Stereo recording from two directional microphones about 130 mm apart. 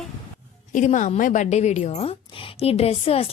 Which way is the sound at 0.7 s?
70° left (ahead or behind).